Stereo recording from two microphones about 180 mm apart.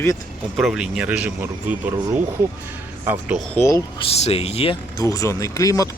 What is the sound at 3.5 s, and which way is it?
Speech, 15° left (ahead or behind).